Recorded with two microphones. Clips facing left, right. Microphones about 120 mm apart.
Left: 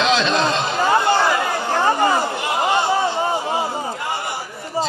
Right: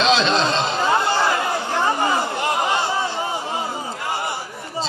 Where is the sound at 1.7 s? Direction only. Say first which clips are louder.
Left 4 dB; 45° left (ahead or behind).